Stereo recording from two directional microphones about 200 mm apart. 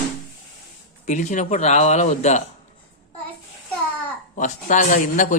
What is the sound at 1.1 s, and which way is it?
Speech, 35° left (ahead or behind).